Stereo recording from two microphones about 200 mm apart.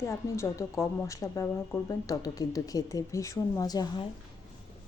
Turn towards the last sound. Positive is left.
turn(degrees=20)  # may be behind; listen again after turning